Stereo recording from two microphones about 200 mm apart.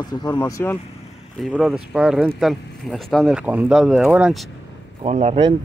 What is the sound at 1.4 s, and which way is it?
Speech, centre (ahead or behind).